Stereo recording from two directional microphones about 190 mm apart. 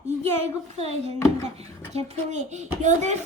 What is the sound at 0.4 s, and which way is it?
A child's voice, 35° right (ahead or behind).